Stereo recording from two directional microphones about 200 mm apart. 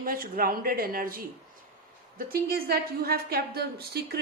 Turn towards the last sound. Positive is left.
turn(degrees=-50)  # may be behind; listen again after turning